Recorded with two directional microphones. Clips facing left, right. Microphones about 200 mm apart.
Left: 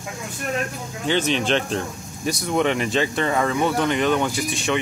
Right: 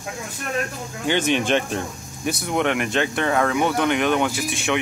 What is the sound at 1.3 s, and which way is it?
Speech, 10° right (ahead or behind).